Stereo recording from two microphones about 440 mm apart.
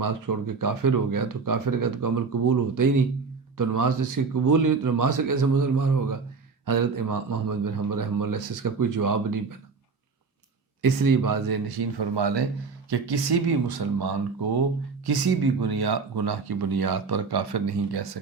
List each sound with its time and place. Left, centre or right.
0.0 s speech: right
10.8 s speech: right